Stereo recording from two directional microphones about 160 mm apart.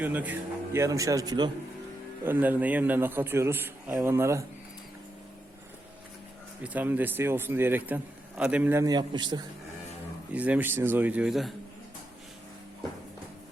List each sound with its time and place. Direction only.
0.0 s speech: 10° right (ahead or behind)
2.2 s a man's voice: 10° right (ahead or behind)
6.6 s a man's voice: 10° right (ahead or behind)
8.8 s speech: 25° right (ahead or behind)
10.3 s a man's voice: 10° right (ahead or behind)